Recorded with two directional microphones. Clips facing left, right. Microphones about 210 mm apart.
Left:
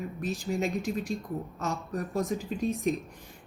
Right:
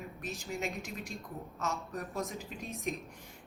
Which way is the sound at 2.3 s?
Centre (ahead or behind).